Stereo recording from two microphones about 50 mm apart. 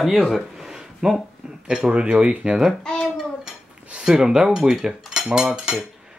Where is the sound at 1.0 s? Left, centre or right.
Centre.